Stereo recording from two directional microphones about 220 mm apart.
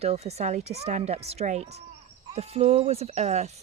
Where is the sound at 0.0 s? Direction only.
30° right (ahead or behind).